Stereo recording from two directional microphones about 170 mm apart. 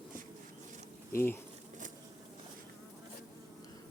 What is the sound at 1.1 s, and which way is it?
Speech, 15° left (ahead or behind).